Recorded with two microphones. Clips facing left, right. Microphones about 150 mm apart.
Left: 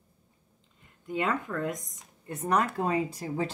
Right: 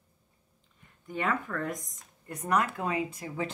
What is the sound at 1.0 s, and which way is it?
Speech, 20° left (ahead or behind).